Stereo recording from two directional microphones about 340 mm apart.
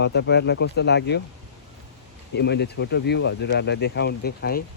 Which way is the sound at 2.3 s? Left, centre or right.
Left.